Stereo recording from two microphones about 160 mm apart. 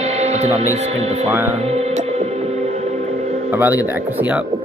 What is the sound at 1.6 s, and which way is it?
Music, 40° right (ahead or behind).